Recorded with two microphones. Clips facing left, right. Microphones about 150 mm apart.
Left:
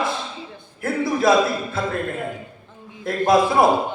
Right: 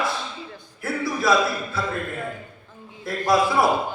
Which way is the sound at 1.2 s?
50° left (ahead or behind).